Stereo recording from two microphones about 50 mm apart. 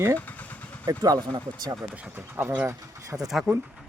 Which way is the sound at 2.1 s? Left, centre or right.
Right.